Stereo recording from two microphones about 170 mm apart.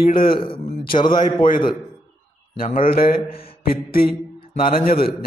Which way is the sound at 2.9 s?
60° left (ahead or behind).